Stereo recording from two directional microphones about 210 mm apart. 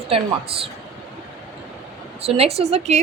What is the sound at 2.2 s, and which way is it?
Speech, 30° right (ahead or behind).